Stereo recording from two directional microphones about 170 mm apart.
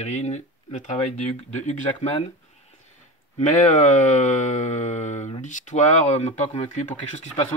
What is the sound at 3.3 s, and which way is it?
Speech, 45° left (ahead or behind).